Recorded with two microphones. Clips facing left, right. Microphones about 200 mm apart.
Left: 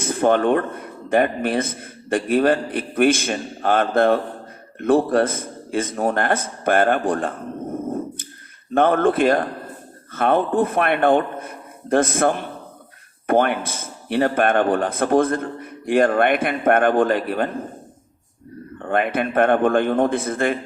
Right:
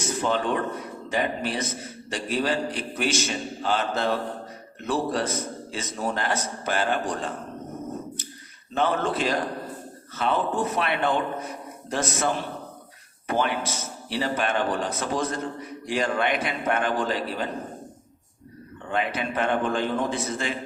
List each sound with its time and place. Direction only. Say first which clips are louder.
0.0 s a man's voice: left 8 dB; 55° left (ahead or behind)
18.8 s a man's voice: left 7 dB; 55° left (ahead or behind)